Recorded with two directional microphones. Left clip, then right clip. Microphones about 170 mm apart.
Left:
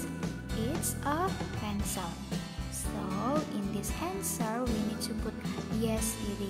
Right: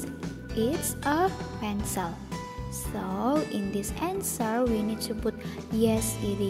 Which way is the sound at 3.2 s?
25° right (ahead or behind).